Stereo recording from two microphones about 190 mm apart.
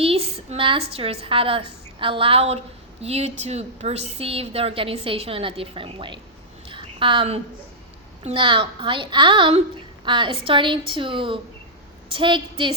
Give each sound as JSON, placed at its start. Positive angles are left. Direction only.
{"t": 0.0, "sound": "a woman's voice", "side_deg": -30}
{"t": 6.7, "sound": "a sound", "side_deg": -25}
{"t": 8.2, "sound": "a woman's voice", "side_deg": -25}